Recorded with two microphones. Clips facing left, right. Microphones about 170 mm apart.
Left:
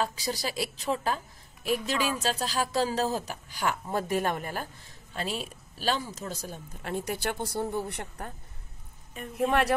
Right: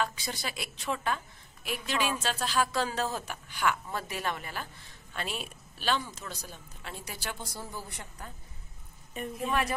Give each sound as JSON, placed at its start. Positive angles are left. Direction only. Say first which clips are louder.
{"t": 0.0, "sound": "a woman's voice", "louder": "left 3 dB", "side_deg": 35}
{"t": 5.1, "sound": "speech", "louder": "left 4 dB", "side_deg": 35}
{"t": 9.3, "sound": "speech", "louder": "left 6 dB", "side_deg": 70}